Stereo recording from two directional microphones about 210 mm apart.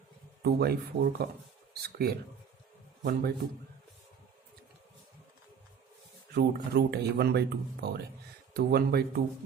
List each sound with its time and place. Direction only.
0.4 s speech: 50° right (ahead or behind)
6.3 s speech: 50° right (ahead or behind)